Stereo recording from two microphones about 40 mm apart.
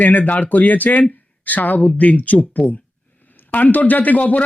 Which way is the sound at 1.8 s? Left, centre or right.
Left.